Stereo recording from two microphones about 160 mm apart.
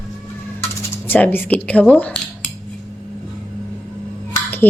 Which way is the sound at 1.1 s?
10° left (ahead or behind).